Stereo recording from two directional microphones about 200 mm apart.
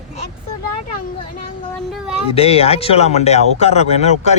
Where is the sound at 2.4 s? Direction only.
30° left (ahead or behind).